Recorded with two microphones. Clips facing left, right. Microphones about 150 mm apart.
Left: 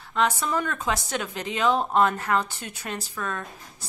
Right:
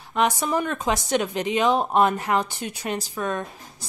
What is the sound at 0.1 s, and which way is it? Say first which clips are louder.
A woman's voice: right 2 dB; 15° right (ahead or behind).